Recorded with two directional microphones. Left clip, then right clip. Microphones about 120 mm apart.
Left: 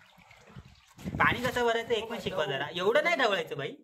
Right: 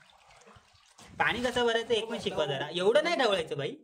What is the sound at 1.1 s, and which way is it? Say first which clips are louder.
A man's voice: left 1 dB; 25° right (ahead or behind).